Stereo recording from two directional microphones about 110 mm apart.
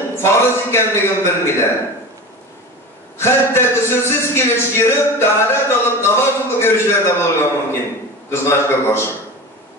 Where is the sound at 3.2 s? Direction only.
25° left (ahead or behind).